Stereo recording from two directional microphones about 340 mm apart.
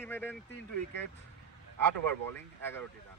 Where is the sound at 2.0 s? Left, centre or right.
Right.